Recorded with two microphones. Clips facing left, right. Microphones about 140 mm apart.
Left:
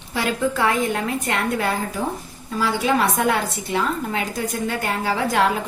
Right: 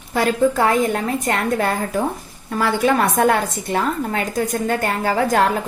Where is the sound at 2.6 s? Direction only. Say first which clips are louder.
Right 3 dB; 55° right (ahead or behind).